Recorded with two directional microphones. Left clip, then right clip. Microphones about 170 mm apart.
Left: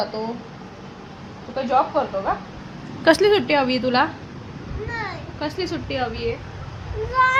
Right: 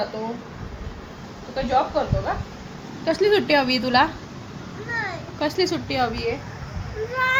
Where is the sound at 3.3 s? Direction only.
5° left (ahead or behind).